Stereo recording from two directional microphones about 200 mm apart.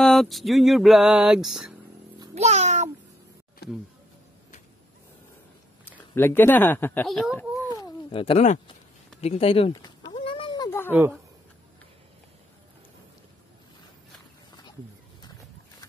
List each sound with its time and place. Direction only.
0.0 s music: centre (ahead or behind)
2.3 s meow: 35° right (ahead or behind)
3.6 s speech: 55° left (ahead or behind)
6.1 s speech: 10° left (ahead or behind)
7.7 s a sound: 25° left (ahead or behind)
9.2 s speech: 30° left (ahead or behind)
9.7 s a sound: 20° left (ahead or behind)
10.9 s speech: 10° right (ahead or behind)